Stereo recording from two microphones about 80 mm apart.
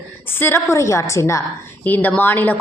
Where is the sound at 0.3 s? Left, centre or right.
Left.